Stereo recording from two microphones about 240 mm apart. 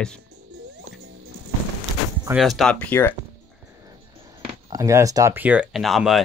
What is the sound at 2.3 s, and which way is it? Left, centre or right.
Speech, centre.